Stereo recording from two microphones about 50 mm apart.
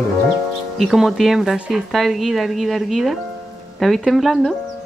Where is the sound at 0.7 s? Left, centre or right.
Centre.